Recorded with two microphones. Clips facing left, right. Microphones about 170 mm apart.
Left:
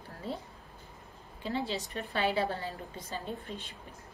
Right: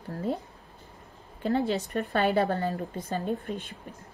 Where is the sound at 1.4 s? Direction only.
55° right (ahead or behind).